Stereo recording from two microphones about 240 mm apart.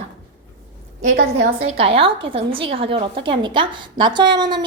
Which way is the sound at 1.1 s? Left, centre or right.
Right.